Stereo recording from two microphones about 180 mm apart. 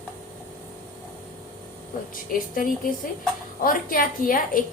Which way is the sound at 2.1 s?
50° left (ahead or behind).